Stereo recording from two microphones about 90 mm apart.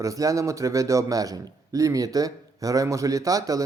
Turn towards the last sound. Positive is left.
turn(degrees=-40)  # may be behind; listen again after turning